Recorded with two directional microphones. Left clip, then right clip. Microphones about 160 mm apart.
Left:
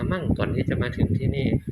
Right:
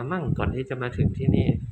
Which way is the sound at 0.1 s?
30° right (ahead or behind).